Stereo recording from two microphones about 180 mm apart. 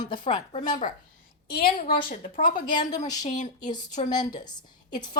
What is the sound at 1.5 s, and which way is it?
A woman's voice, 55° left (ahead or behind).